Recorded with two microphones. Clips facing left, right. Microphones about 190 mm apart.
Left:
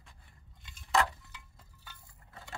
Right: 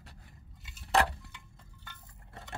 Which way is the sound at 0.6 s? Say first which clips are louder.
Right 1 dB; 5° right (ahead or behind).